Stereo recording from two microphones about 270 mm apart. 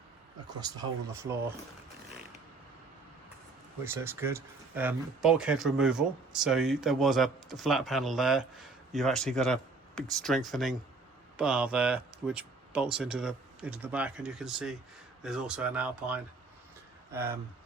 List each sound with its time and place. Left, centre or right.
0.4 s speech: centre
3.8 s speech: centre